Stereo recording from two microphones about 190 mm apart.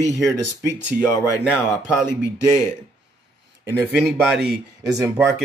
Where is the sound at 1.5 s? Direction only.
10° left (ahead or behind).